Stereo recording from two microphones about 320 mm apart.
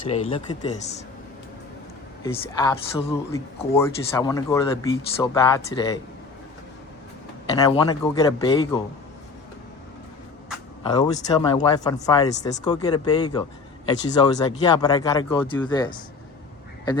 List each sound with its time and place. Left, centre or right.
0.1 s speech: centre
2.2 s speech: centre
7.5 s speech: centre
10.8 s speech: centre